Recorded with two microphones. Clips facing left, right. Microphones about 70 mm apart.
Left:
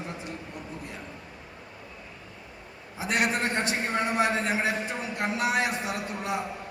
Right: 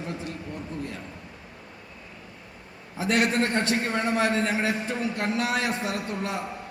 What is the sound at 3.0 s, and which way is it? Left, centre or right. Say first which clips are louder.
A man's voice: right 3 dB; left.